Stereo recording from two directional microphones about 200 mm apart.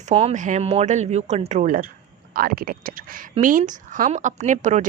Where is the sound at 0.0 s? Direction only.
30° right (ahead or behind).